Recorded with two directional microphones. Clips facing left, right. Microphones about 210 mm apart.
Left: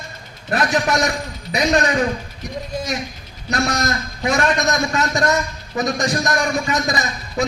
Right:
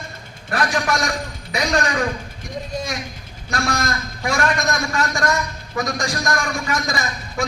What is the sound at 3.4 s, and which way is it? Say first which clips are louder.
A man's voice: left 3 dB; 20° left (ahead or behind).